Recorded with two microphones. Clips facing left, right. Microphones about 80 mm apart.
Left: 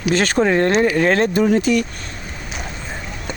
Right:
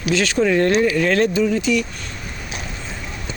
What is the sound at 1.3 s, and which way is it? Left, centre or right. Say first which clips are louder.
Speech: left 3 dB; left.